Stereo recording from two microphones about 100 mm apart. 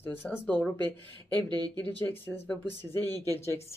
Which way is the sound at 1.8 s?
20° left (ahead or behind).